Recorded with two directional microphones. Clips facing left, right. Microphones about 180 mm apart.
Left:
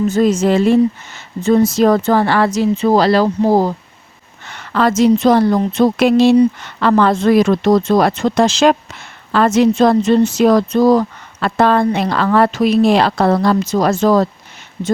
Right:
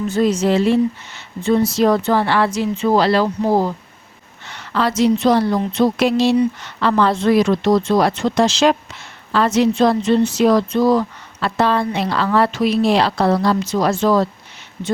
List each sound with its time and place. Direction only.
0.1 s speech: 45° left (ahead or behind)
4.4 s speech: 50° left (ahead or behind)